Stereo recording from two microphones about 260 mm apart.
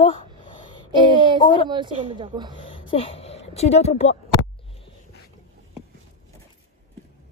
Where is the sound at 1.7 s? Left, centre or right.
Centre.